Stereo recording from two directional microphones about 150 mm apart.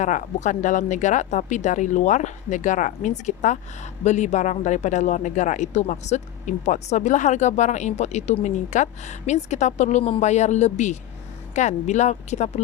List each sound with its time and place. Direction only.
0.0 s speech: 55° left (ahead or behind)